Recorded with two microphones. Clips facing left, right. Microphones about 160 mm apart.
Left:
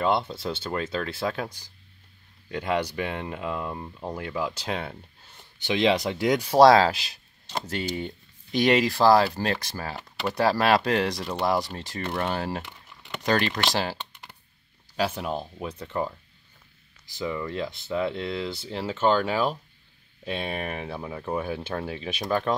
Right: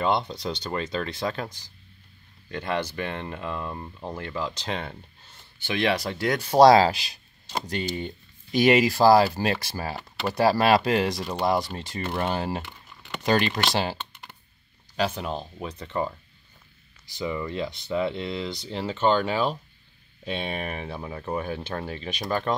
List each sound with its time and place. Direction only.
0.0 s speech: 5° left (ahead or behind)
5.6 s speech: 20° left (ahead or behind)
6.6 s speech: centre (ahead or behind)
17.1 s speech: centre (ahead or behind)